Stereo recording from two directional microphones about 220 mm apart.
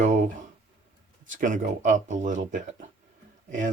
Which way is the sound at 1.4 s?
35° right (ahead or behind).